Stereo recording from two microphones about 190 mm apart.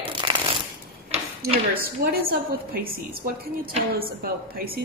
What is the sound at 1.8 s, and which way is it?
A woman's voice, 50° right (ahead or behind).